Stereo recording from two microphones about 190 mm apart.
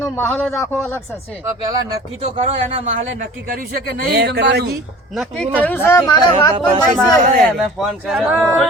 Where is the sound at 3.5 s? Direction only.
50° right (ahead or behind).